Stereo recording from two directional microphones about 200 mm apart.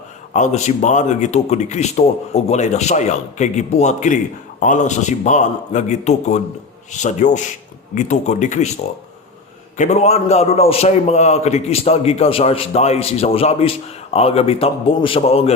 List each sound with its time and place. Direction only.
0.3 s a man's voice: 35° left (ahead or behind)
9.7 s a man's voice: 35° left (ahead or behind)